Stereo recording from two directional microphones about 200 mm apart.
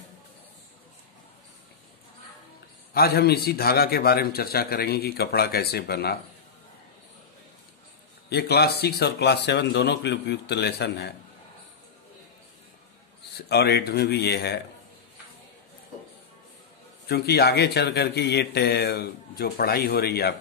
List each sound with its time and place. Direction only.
2.9 s a man's voice: 50° left (ahead or behind)
8.3 s speech: 55° left (ahead or behind)
13.4 s speech: 55° left (ahead or behind)
17.1 s a man's voice: 50° left (ahead or behind)